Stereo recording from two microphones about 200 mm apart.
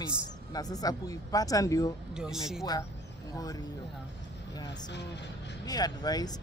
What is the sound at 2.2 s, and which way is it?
Speech, centre (ahead or behind).